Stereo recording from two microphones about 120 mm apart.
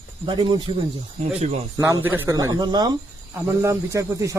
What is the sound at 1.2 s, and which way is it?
Speech, 65° right (ahead or behind).